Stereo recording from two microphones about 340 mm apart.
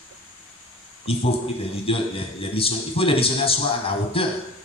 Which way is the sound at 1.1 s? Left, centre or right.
Centre.